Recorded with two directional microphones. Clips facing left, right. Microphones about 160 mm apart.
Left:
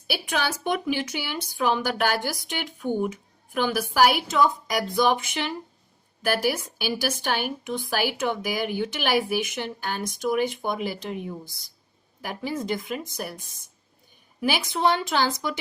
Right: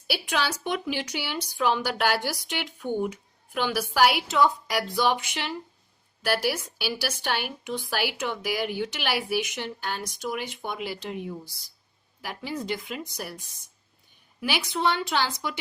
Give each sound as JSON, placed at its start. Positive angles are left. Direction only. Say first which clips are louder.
{"t": 0.1, "sound": "a woman's voice", "louder": "left 1 dB", "side_deg": 50}